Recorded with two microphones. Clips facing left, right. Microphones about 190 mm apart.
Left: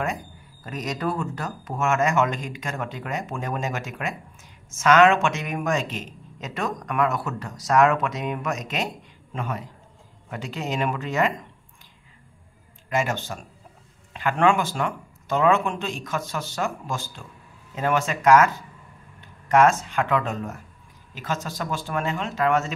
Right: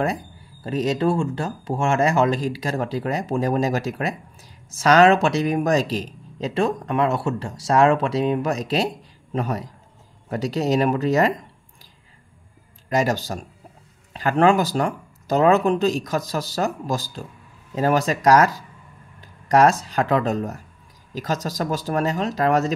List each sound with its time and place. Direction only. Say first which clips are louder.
0.7 s speech: right 7 dB; 30° right (ahead or behind)
12.9 s speech: right 4 dB; 40° right (ahead or behind)